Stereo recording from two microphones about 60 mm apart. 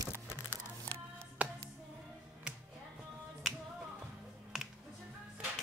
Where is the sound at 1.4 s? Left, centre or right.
Right.